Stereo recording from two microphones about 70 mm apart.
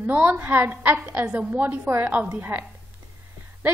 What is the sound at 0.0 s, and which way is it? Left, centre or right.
A woman's voice, right.